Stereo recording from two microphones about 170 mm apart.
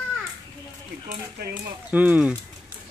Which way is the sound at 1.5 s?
10° right (ahead or behind).